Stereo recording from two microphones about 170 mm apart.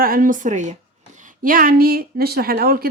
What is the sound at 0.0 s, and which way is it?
A woman's voice, 55° right (ahead or behind).